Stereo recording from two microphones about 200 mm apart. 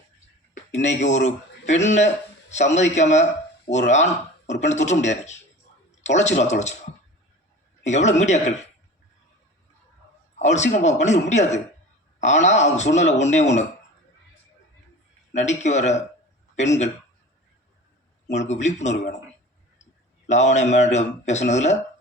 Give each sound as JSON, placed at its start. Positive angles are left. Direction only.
{"t": 0.5, "sound": "a man's voice", "side_deg": 35}
{"t": 7.9, "sound": "speech", "side_deg": 35}
{"t": 10.3, "sound": "speech", "side_deg": 35}
{"t": 15.3, "sound": "speech", "side_deg": 35}
{"t": 18.3, "sound": "speech", "side_deg": 35}
{"t": 20.2, "sound": "speech", "side_deg": 35}